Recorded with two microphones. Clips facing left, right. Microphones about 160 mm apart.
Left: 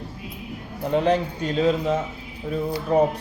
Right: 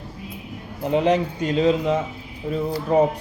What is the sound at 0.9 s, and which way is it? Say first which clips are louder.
Speech: right 1 dB; 10° right (ahead or behind).